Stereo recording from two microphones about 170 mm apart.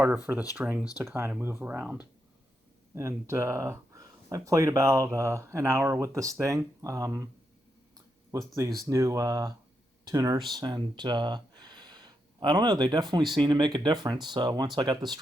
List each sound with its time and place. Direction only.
0.5 s speech: 10° right (ahead or behind)
8.3 s speech: 15° right (ahead or behind)